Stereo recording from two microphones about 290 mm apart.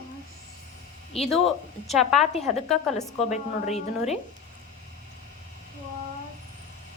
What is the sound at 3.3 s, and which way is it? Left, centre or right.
Speech, left.